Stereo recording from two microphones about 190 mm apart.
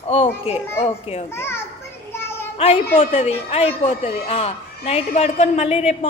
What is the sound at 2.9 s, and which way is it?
Speech, 35° left (ahead or behind).